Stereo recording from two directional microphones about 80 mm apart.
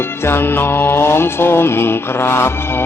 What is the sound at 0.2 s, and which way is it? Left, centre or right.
Mantra, left.